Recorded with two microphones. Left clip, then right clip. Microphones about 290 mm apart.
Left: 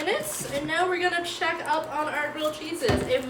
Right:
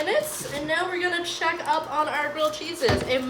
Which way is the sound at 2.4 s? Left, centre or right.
Right.